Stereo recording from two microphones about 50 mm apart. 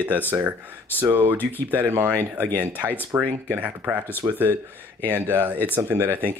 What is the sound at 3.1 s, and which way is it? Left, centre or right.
Speech, right.